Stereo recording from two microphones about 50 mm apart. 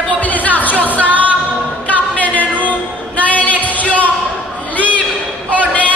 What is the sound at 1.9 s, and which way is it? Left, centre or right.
Music, left.